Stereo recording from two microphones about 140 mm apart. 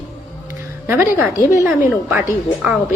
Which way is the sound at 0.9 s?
15° right (ahead or behind).